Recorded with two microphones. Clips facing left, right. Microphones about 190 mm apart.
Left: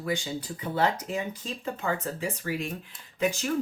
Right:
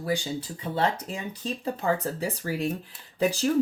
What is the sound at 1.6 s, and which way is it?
Speech, 35° right (ahead or behind).